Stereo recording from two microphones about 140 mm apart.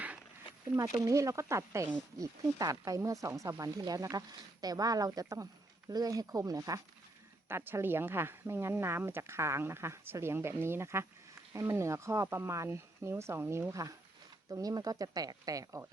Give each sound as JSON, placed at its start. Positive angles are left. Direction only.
{"t": 1.0, "sound": "speech", "side_deg": -20}